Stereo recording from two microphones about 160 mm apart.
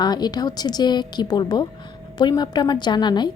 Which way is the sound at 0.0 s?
25° left (ahead or behind).